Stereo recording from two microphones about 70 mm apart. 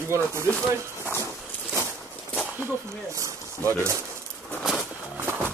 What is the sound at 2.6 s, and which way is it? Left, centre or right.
Speech, right.